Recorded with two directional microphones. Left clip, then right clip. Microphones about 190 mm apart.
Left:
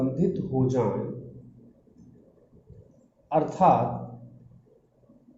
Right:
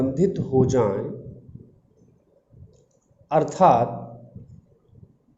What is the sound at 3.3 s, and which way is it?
Speech, 55° right (ahead or behind).